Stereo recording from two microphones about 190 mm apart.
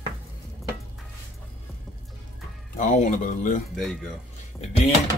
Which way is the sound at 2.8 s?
45° left (ahead or behind).